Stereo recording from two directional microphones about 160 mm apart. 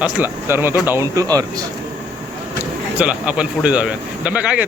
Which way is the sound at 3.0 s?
5° right (ahead or behind).